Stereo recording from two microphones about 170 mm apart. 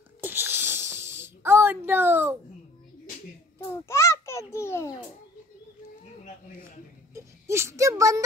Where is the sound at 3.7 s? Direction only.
15° left (ahead or behind).